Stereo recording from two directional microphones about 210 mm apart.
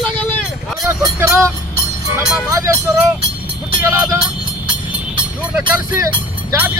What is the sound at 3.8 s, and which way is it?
Speech, 15° right (ahead or behind).